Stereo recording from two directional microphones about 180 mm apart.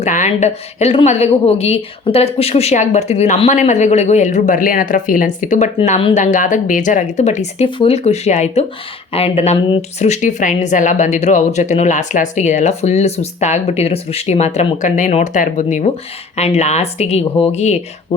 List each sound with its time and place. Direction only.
0.0 s speech: 40° left (ahead or behind)